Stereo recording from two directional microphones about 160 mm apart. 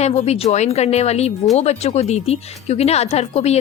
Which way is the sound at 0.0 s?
40° left (ahead or behind).